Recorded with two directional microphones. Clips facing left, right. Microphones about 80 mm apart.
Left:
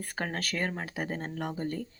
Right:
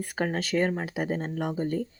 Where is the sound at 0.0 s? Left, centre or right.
Centre.